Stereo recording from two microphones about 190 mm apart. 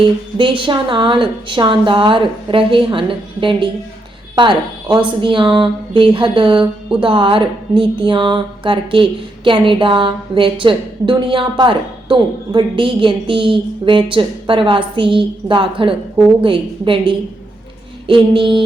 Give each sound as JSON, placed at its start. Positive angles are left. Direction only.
{"t": 0.3, "sound": "speech", "side_deg": -25}